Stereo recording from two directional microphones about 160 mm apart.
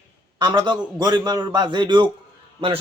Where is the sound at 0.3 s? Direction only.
30° right (ahead or behind).